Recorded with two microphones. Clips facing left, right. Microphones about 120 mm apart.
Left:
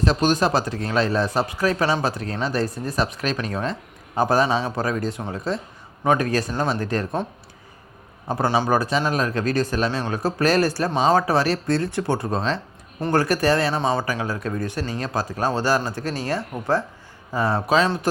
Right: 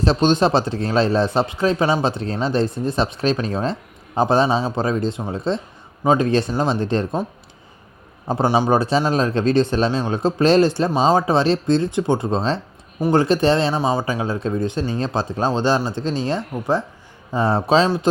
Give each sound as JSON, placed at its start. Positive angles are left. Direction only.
{"t": 0.0, "sound": "a man's voice", "side_deg": -25}
{"t": 8.4, "sound": "a man's voice", "side_deg": -15}
{"t": 13.7, "sound": "a man's voice", "side_deg": -15}
{"t": 17.8, "sound": "speech", "side_deg": -15}